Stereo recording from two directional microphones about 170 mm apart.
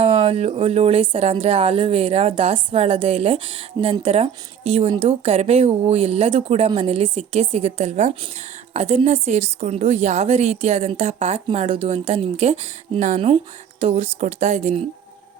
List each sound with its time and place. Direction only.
0.0 s speech: 40° right (ahead or behind)